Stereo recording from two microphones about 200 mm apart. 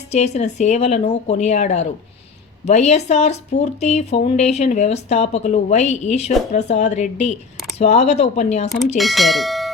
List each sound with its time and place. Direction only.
0.1 s speech: 35° left (ahead or behind)
9.0 s speech: centre (ahead or behind)